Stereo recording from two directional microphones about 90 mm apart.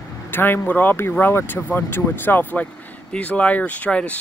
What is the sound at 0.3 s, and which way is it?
Speech, 25° left (ahead or behind).